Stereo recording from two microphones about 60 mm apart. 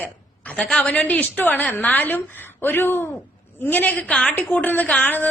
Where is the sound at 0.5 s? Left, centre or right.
Centre.